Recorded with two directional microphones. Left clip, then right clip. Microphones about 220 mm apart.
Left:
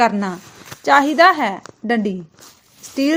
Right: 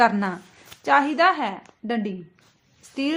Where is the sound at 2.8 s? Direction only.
30° left (ahead or behind).